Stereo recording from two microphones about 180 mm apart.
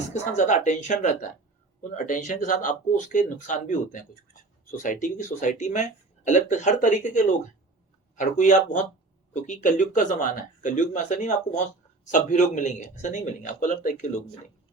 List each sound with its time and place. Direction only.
0.1 s speech: 40° left (ahead or behind)